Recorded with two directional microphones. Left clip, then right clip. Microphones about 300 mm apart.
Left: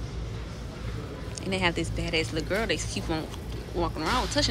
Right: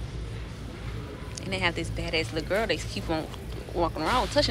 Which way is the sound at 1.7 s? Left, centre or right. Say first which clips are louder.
Even; centre.